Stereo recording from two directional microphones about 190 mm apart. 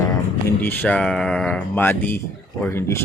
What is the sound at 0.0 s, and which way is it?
Speech, 15° left (ahead or behind).